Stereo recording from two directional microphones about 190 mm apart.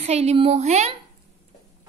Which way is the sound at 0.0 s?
35° right (ahead or behind).